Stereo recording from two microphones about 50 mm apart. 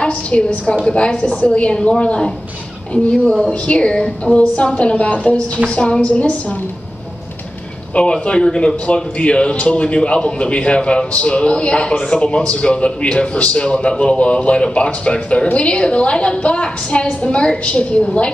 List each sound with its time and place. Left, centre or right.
0.0 s a man's voice: left
7.9 s a man's voice: left